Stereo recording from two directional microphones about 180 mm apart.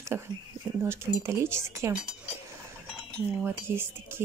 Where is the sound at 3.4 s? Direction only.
15° right (ahead or behind).